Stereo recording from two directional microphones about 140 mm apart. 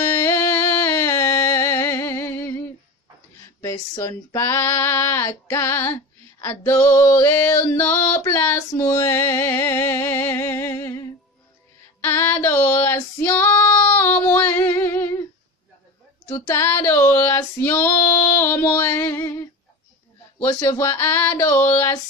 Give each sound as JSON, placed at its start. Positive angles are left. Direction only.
{"t": 0.0, "sound": "music", "side_deg": 20}
{"t": 3.6, "sound": "female singing", "side_deg": 25}
{"t": 7.2, "sound": "a sound", "side_deg": 15}
{"t": 12.0, "sound": "female singing", "side_deg": 15}
{"t": 16.3, "sound": "a sound", "side_deg": 25}
{"t": 18.7, "sound": "female singing", "side_deg": 20}
{"t": 20.3, "sound": "female singing", "side_deg": 20}